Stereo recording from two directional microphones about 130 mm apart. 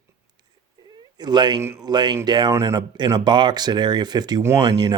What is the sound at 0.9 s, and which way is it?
Speech, 35° right (ahead or behind).